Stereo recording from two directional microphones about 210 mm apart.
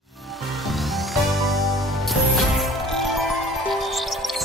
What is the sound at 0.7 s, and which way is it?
Music, centre (ahead or behind).